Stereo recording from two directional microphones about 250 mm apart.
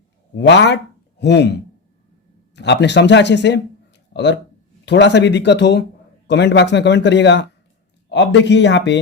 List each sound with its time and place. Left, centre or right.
0.3 s speech: left
2.6 s speech: left